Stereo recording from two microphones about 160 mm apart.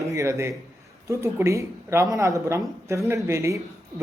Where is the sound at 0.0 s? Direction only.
20° right (ahead or behind).